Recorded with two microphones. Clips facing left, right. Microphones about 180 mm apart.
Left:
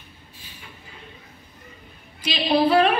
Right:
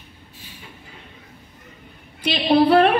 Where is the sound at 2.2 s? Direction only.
60° right (ahead or behind).